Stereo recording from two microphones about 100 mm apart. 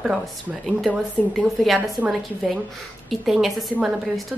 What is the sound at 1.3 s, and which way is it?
A woman's voice, centre (ahead or behind).